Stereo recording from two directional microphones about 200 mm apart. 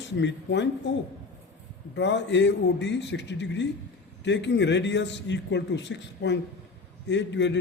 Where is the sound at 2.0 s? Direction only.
60° left (ahead or behind).